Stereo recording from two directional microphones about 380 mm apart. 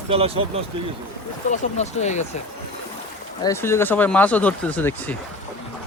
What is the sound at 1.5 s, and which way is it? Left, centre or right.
Speech, centre.